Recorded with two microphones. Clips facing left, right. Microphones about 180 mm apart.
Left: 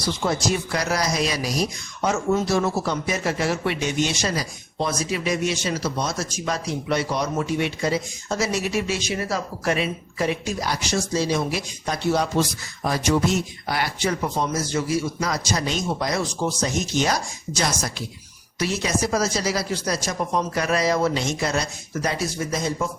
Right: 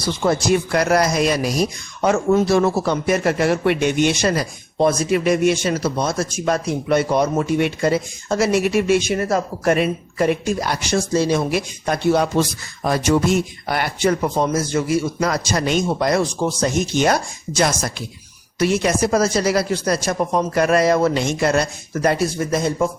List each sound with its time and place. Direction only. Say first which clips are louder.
0.2 s speech: right 8 dB; 55° right (ahead or behind)